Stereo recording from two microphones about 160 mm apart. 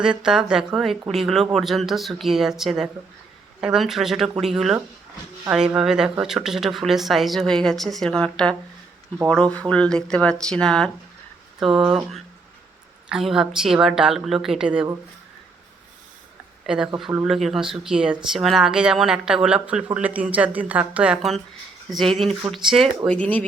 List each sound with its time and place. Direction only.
0.0 s speech: 5° right (ahead or behind)
11.8 s speech: 30° right (ahead or behind)
13.1 s speech: 5° right (ahead or behind)
16.6 s speech: 5° right (ahead or behind)